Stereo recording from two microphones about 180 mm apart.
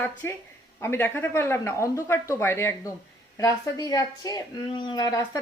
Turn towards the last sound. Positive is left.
turn(degrees=20)  # may be behind; listen again after turning